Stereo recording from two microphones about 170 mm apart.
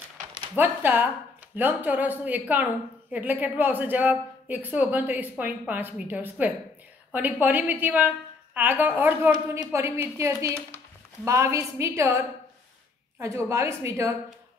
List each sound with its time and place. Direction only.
0.6 s a woman's voice: 10° right (ahead or behind)